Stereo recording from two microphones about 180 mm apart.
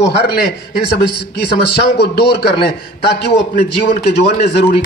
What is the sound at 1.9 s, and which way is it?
A man's voice, 65° left (ahead or behind).